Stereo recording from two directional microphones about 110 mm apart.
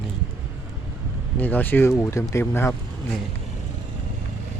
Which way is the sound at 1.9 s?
30° left (ahead or behind).